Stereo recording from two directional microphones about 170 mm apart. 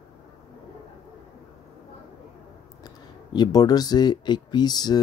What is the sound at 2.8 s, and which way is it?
Speech, 25° left (ahead or behind).